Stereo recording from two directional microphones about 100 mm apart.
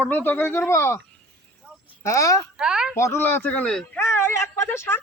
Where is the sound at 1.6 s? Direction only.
10° right (ahead or behind).